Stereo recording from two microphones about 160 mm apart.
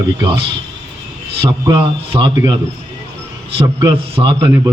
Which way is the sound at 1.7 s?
30° right (ahead or behind).